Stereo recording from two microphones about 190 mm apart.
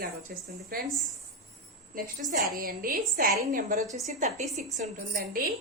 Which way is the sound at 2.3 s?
50° right (ahead or behind).